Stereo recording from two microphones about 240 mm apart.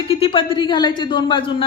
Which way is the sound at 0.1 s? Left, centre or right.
Left.